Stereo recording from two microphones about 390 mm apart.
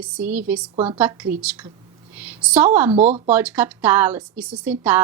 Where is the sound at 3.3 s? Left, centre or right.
Centre.